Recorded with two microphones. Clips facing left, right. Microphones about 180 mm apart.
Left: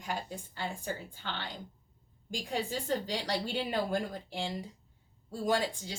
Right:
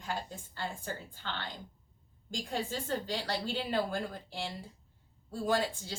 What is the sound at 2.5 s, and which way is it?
A woman's voice, 15° left (ahead or behind).